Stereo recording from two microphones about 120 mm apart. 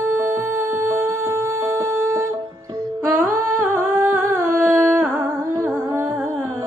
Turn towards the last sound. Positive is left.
turn(degrees=-20)  # may be behind; listen again after turning